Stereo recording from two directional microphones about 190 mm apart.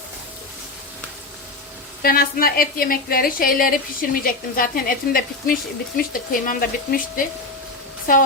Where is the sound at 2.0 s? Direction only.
50° left (ahead or behind).